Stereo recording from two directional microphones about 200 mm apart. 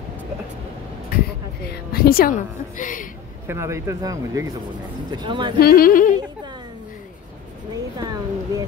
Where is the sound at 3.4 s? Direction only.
15° right (ahead or behind).